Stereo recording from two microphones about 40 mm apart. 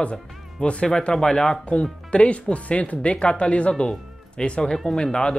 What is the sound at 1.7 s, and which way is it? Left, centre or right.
Speech, left.